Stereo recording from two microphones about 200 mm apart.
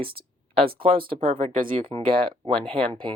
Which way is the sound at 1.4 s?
40° right (ahead or behind).